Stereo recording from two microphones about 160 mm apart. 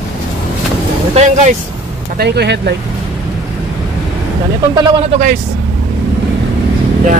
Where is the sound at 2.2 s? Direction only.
90° right.